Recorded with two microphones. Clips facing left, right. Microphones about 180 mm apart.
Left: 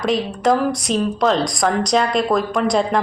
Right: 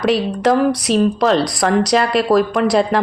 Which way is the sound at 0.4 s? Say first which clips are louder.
Right 3 dB; centre (ahead or behind).